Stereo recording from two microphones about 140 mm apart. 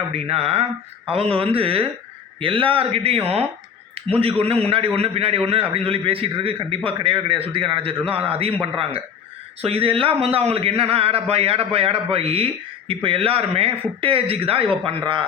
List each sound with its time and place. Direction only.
0.1 s a man's voice: 45° right (ahead or behind)